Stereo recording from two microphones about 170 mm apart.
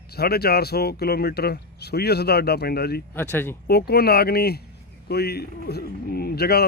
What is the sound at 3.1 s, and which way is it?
Speech, 10° left (ahead or behind).